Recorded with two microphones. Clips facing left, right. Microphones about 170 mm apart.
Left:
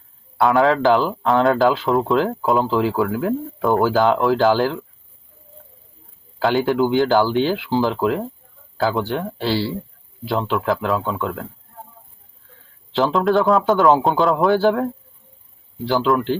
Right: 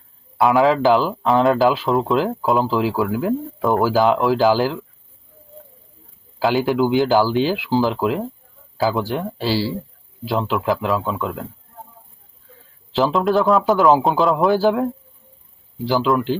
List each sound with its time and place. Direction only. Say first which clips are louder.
0.3 s speech: right 1 dB; centre (ahead or behind)
6.4 s speech: even; centre (ahead or behind)
12.9 s speech: even; 5° right (ahead or behind)
15.9 s speech: even; 5° right (ahead or behind)